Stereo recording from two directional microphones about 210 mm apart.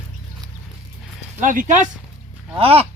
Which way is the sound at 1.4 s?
35° right (ahead or behind).